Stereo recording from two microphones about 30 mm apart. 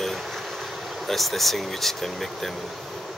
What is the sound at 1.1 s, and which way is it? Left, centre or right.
Speech, centre.